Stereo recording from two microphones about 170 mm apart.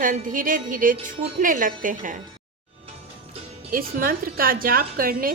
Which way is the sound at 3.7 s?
55° right (ahead or behind).